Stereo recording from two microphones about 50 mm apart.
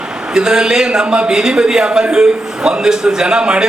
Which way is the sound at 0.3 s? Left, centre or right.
Centre.